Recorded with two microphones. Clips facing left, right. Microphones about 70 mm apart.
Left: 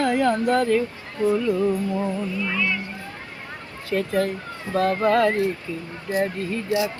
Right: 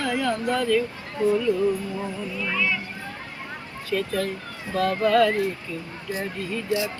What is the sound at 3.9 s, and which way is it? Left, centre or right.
Music, left.